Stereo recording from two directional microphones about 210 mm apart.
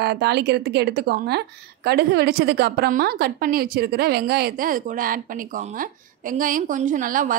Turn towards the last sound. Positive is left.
turn(degrees=-40)  # may be behind; listen again after turning